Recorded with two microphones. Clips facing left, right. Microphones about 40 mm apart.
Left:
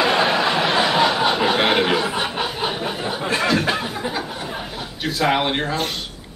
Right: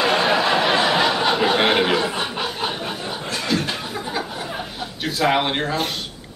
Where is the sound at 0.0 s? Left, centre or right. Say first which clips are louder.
Even; centre.